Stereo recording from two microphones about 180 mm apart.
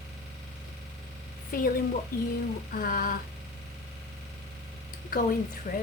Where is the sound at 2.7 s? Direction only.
50° left (ahead or behind).